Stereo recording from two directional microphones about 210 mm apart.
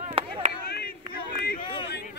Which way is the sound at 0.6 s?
45° left (ahead or behind).